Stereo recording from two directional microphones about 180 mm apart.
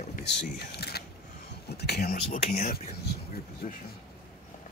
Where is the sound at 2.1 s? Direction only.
50° left (ahead or behind).